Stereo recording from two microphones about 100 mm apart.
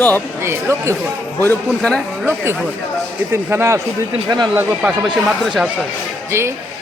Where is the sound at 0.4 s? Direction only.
25° right (ahead or behind).